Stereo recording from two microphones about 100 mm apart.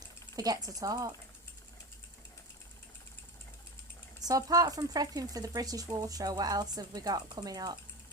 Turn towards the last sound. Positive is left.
turn(degrees=-40)  # may be behind; listen again after turning